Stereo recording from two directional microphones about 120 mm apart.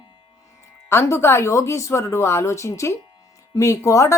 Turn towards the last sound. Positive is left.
turn(degrees=25)  # may be behind; listen again after turning